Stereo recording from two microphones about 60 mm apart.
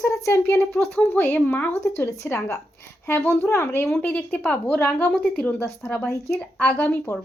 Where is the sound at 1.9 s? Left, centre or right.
Left.